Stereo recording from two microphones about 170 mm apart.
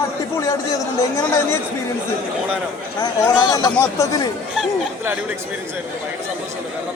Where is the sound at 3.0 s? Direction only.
25° left (ahead or behind).